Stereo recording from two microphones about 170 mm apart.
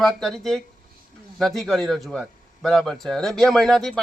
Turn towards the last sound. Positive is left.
turn(degrees=0)  # may be behind; listen again after turning